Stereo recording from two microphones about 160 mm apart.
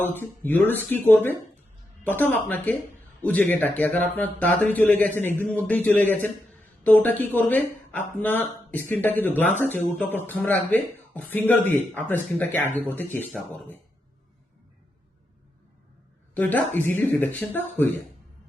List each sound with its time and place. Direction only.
0.0 s speech: 10° left (ahead or behind)
16.3 s speech: 10° left (ahead or behind)